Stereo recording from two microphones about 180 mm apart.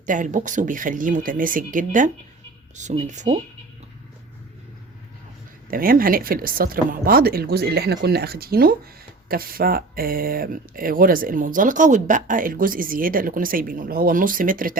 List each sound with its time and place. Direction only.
0.0 s speech: 45° right (ahead or behind)
5.7 s speech: 50° right (ahead or behind)